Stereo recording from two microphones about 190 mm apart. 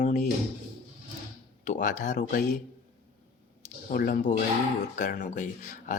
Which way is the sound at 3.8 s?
45° left (ahead or behind).